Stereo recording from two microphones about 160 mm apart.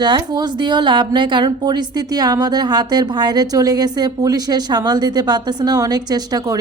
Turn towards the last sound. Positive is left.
turn(degrees=-25)  # may be behind; listen again after turning